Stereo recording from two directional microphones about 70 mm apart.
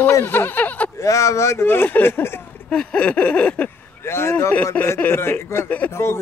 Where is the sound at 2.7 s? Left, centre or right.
Centre.